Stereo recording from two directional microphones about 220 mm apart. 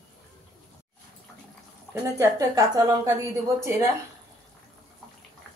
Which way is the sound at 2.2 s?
15° right (ahead or behind).